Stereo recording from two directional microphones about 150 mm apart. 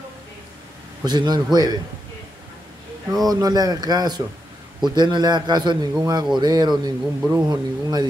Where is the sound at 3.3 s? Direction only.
25° right (ahead or behind).